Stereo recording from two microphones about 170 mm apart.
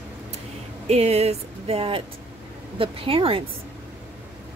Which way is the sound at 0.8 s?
40° right (ahead or behind).